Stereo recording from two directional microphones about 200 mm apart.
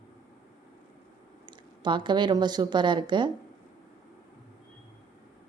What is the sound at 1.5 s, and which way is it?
Speech, 25° right (ahead or behind).